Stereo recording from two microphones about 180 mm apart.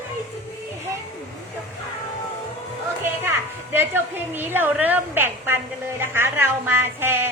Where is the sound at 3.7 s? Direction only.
10° right (ahead or behind).